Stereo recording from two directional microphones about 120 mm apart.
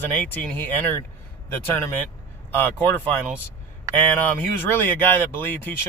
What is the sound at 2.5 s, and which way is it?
Speech, 15° left (ahead or behind).